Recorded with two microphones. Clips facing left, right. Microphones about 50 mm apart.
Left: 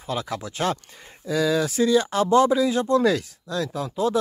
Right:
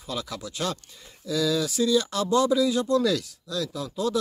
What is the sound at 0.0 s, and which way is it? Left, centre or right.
Speech, left.